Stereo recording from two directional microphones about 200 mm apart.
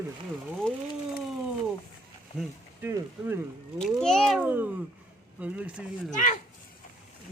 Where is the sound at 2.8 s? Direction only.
10° right (ahead or behind).